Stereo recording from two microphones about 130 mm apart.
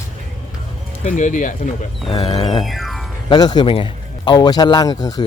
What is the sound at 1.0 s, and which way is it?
Speech, 75° left (ahead or behind).